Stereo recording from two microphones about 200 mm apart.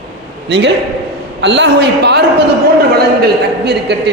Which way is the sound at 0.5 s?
60° right (ahead or behind).